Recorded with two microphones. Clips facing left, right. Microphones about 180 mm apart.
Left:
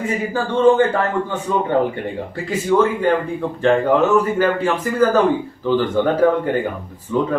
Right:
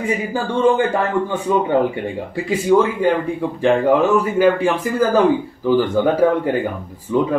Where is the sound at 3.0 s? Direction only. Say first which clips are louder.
Right 1 dB; 10° right (ahead or behind).